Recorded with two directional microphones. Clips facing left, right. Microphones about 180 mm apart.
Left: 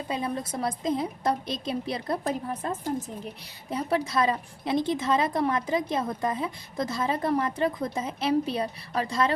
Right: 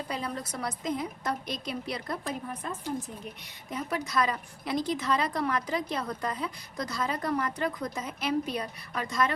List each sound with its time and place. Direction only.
0.1 s a woman's voice: 20° left (ahead or behind)